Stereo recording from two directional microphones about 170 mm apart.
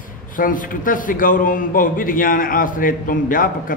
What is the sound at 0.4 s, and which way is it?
A man's voice, 50° left (ahead or behind).